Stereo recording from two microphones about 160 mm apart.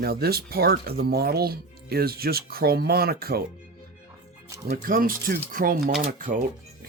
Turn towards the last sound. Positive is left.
turn(degrees=-55)  # may be behind; listen again after turning